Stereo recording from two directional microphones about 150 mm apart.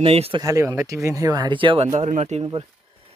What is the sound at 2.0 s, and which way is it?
Speech, 50° right (ahead or behind).